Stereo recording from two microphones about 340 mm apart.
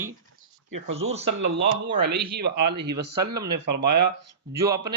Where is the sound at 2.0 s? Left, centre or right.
Right.